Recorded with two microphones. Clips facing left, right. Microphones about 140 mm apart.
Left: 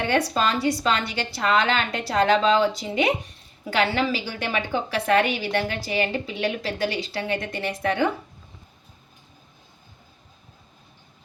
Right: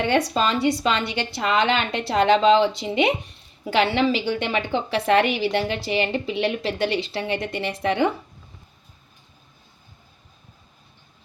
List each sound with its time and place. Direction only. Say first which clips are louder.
0.1 s a woman's voice: left 1 dB; 25° right (ahead or behind)